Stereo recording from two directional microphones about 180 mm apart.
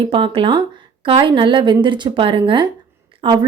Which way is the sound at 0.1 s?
30° right (ahead or behind).